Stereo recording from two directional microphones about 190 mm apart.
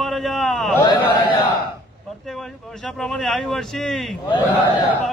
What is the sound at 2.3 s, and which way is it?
Speech, centre (ahead or behind).